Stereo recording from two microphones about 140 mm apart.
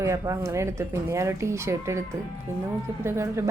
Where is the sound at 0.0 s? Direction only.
20° right (ahead or behind).